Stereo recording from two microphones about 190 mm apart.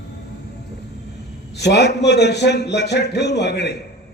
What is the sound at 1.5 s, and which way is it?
A man's voice, 60° left (ahead or behind).